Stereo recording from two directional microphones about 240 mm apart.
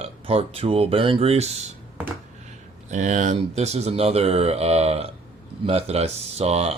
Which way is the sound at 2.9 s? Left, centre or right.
Right.